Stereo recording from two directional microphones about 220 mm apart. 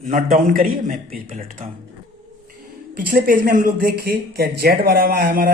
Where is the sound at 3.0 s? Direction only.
40° right (ahead or behind).